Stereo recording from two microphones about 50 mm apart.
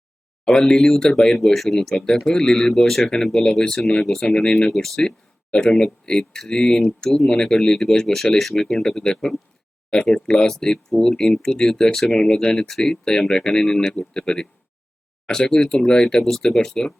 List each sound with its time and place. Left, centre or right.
0.4 s speech: centre
4.7 s speech: centre